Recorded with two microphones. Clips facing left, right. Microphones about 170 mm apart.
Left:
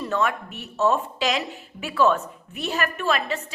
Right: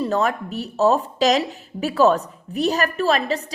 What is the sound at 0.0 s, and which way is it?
A woman's voice, 35° right (ahead or behind).